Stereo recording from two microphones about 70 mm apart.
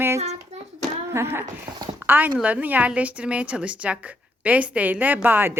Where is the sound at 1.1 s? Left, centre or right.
Right.